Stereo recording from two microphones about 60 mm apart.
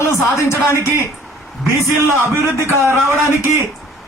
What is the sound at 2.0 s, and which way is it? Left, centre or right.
Speech, left.